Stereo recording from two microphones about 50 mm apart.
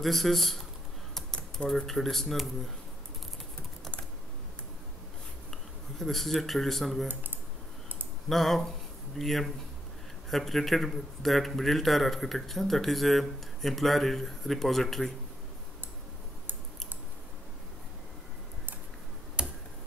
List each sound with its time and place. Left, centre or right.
0.0 s speech: centre
1.7 s speech: centre
5.5 s speech: centre
8.3 s speech: centre
19.4 s finger snapping: centre